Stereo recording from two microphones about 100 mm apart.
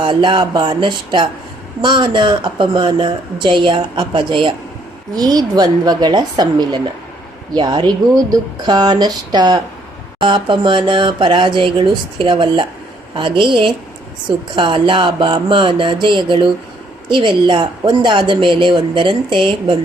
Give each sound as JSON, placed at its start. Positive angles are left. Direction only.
{"t": 0.0, "sound": "a woman's voice", "side_deg": -55}
{"t": 5.1, "sound": "a woman's voice", "side_deg": -40}